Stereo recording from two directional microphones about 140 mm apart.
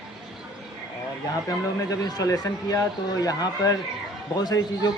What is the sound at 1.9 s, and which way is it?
A man's voice, 25° left (ahead or behind).